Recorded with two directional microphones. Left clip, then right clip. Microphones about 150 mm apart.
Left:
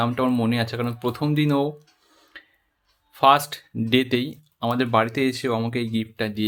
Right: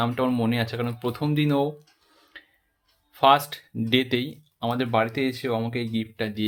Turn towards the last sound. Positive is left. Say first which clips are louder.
# left 2 dB
turn(degrees=30)  # may be behind; listen again after turning